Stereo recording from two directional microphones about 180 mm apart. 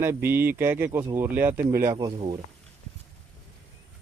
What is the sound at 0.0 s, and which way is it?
Speech, 15° right (ahead or behind).